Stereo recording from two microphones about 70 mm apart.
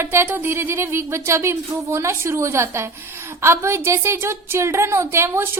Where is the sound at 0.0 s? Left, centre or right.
Right.